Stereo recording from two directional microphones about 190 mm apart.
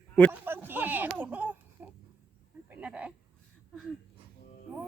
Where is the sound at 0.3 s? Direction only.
10° right (ahead or behind).